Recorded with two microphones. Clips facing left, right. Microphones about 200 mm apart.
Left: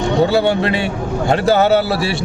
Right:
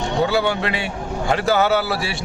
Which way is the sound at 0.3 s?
30° left (ahead or behind).